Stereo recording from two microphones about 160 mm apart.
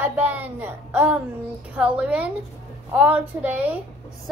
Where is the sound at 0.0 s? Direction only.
10° right (ahead or behind).